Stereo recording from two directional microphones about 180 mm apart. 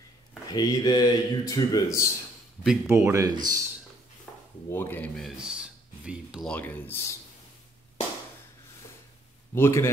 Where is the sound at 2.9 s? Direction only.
15° right (ahead or behind).